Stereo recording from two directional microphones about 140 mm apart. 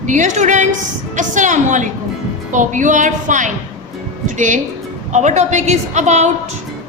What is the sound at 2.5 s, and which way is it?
Music, 65° right (ahead or behind).